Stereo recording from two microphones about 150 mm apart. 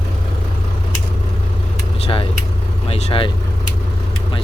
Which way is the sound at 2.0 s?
40° left (ahead or behind).